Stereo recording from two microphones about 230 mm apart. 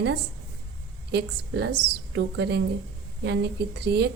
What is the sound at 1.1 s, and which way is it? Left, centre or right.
A woman's voice, right.